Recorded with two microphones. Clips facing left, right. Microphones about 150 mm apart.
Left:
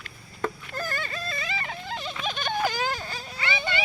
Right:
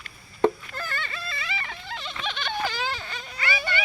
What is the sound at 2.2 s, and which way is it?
Vehicle, 45° left (ahead or behind).